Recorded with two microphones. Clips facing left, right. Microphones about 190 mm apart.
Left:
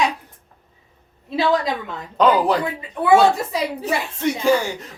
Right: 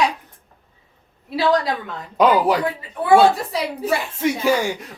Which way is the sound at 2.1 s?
10° right (ahead or behind).